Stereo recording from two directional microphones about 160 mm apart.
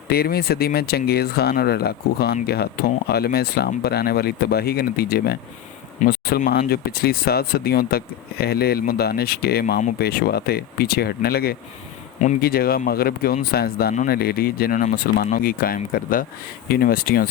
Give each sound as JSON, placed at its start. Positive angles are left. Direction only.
{"t": 0.1, "sound": "speech", "side_deg": 75}
{"t": 6.0, "sound": "speech", "side_deg": 50}
{"t": 6.6, "sound": "speech", "side_deg": 75}